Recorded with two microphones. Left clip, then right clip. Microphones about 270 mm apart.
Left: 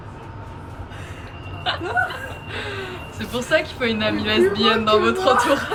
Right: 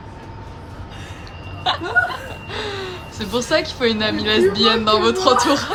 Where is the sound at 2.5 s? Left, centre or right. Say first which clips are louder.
Right 4 dB; centre.